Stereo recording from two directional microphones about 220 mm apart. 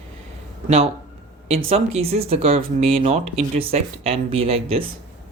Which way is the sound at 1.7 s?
25° right (ahead or behind).